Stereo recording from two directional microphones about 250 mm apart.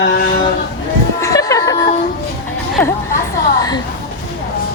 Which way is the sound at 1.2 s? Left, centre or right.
Centre.